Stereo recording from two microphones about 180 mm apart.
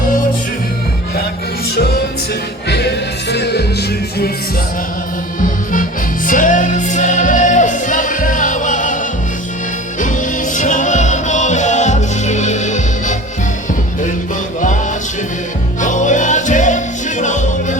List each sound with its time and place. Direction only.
1.7 s music: 60° left (ahead or behind)
5.4 s music: 45° left (ahead or behind)
10.0 s music: 45° left (ahead or behind)
15.8 s music: 45° left (ahead or behind)